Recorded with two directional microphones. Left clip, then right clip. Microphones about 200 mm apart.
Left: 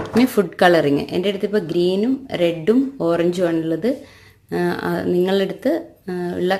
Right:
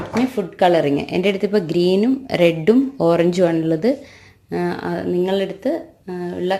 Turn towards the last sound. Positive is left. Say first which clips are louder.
# left 1 dB
turn(degrees=10)  # may be behind; listen again after turning